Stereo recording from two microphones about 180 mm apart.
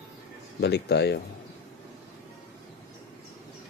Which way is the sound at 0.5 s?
65° left (ahead or behind).